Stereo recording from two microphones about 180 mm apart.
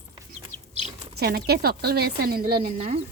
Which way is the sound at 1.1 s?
65° right (ahead or behind).